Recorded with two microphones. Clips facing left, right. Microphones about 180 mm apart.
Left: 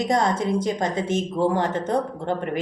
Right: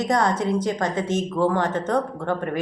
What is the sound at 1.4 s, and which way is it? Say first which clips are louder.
Speech: right 1 dB; 20° left (ahead or behind).